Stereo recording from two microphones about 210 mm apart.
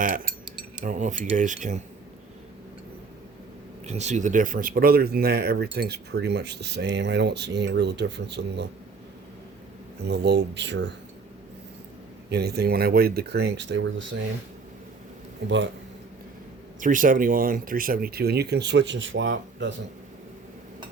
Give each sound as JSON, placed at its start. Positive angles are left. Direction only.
{"t": 0.0, "sound": "cutlery", "side_deg": -40}
{"t": 0.9, "sound": "speech", "side_deg": -35}
{"t": 3.8, "sound": "speech", "side_deg": -35}
{"t": 10.0, "sound": "speech", "side_deg": -55}
{"t": 12.3, "sound": "speech", "side_deg": -50}
{"t": 15.4, "sound": "speech", "side_deg": -60}
{"t": 16.8, "sound": "speech", "side_deg": -40}